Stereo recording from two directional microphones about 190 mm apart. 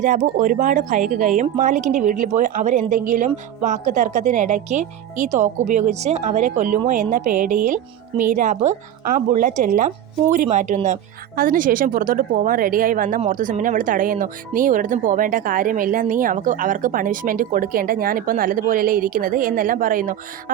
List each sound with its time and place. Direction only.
0.0 s speech: 40° right (ahead or behind)